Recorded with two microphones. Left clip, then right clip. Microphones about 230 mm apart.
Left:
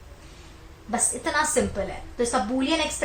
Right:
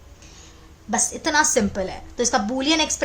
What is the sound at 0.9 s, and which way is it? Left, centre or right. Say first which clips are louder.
A woman's voice: right 5 dB; right.